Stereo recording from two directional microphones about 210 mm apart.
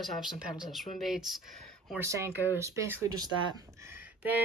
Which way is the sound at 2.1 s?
15° right (ahead or behind).